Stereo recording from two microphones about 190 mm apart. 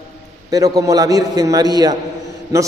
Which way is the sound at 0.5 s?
20° right (ahead or behind).